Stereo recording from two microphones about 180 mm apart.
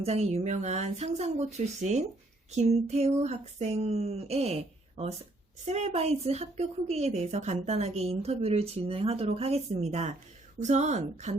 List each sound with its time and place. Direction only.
0.0 s speech: 35° right (ahead or behind)